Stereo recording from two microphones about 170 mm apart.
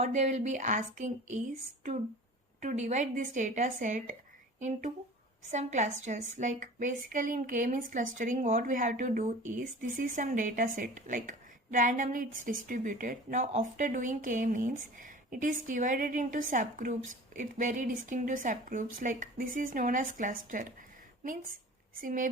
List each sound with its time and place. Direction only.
0.0 s a woman's voice: 45° right (ahead or behind)
2.6 s a woman's voice: 45° right (ahead or behind)
5.5 s a woman's voice: 45° right (ahead or behind)
22.0 s a woman's voice: 50° right (ahead or behind)